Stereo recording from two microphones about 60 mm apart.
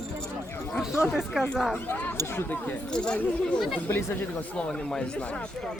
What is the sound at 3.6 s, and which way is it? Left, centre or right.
Speech, centre.